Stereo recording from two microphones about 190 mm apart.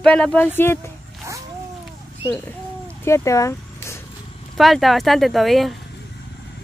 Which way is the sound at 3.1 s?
15° left (ahead or behind).